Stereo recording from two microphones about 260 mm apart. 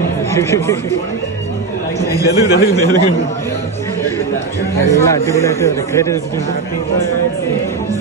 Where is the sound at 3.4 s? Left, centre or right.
Centre.